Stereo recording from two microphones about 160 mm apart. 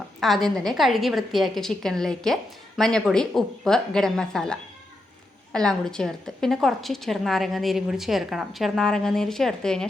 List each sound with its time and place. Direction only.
0.2 s a woman's voice: centre (ahead or behind)